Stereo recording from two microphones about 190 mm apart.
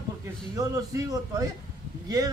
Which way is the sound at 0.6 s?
20° right (ahead or behind).